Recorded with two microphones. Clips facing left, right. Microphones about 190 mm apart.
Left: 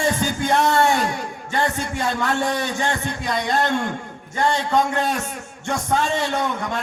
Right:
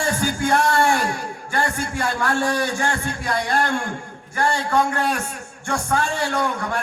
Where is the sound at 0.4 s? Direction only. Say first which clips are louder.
Left 1 dB; 20° left (ahead or behind).